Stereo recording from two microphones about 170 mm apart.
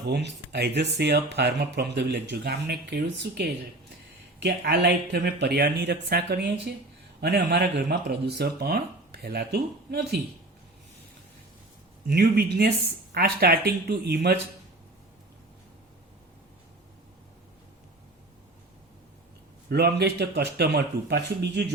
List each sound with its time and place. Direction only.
0.1 s speech: 90° right; by 10.2 s 70° right (ahead or behind)
12.0 s speech: 70° right (ahead or behind)
19.7 s speech: 75° right (ahead or behind)